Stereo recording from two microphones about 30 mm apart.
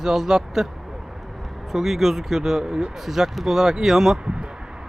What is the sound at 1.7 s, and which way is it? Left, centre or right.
Speech, centre.